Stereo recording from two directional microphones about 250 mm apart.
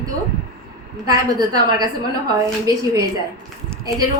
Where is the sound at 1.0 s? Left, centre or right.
Centre.